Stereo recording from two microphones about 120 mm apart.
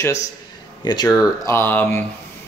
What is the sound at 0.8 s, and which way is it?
A man's voice, 35° left (ahead or behind).